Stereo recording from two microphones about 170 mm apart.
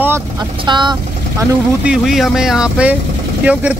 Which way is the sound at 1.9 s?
Centre (ahead or behind).